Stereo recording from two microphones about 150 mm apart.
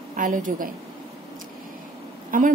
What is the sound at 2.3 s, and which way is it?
Speech, 65° right (ahead or behind).